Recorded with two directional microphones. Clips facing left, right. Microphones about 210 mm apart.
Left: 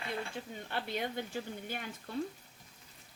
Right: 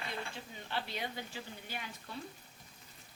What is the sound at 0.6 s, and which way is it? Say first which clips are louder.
Speech: left 2 dB; 50° left (ahead or behind).